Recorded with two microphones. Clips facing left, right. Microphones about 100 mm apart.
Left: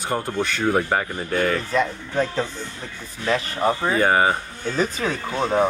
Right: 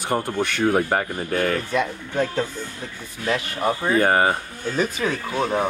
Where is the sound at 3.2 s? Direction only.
35° left (ahead or behind).